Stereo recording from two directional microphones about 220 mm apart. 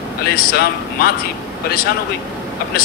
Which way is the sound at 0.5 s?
45° left (ahead or behind).